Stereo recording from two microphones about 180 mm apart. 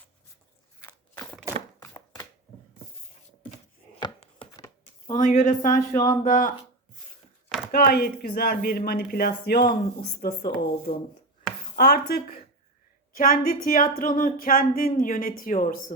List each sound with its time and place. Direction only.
0.8 s biting: 15° left (ahead or behind)
1.8 s chopping: 20° left (ahead or behind)
4.0 s a sound: 25° left (ahead or behind)
5.1 s speech: 45° left (ahead or behind)
5.9 s speech: 15° left (ahead or behind)
6.2 s speech: 45° left (ahead or behind)
7.7 s speech: 60° left (ahead or behind)